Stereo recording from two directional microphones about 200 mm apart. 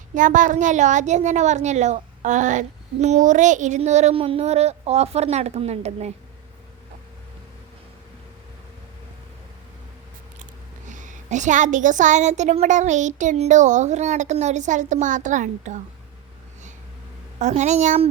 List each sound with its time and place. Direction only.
0.1 s a woman's voice: 40° right (ahead or behind)
10.8 s a woman's voice: 40° right (ahead or behind)
17.4 s a woman's voice: 35° right (ahead or behind)